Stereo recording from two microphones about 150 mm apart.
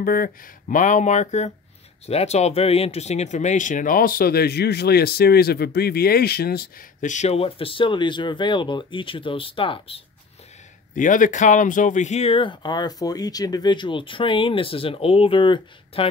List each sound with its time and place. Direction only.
0.0 s speech: 75° left (ahead or behind)
7.1 s speech: 50° left (ahead or behind)
11.0 s speech: 60° left (ahead or behind); by 16.1 s 35° left (ahead or behind)